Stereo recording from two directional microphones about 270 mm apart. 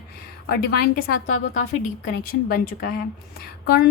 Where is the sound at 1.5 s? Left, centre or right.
Left.